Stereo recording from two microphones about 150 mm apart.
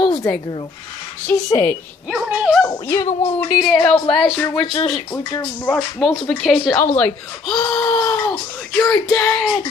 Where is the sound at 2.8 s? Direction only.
15° left (ahead or behind).